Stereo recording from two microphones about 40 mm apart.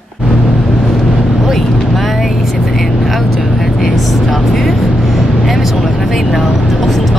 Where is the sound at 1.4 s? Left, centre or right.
Centre.